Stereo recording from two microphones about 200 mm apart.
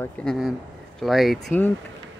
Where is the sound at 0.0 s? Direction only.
5° left (ahead or behind).